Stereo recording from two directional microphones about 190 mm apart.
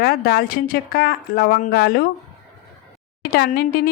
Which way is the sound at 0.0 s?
55° left (ahead or behind).